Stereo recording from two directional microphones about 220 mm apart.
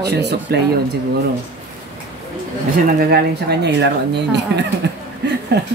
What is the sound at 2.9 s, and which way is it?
Speech, 45° right (ahead or behind).